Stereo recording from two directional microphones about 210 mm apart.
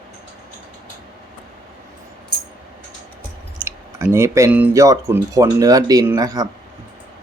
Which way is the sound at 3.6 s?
10° right (ahead or behind).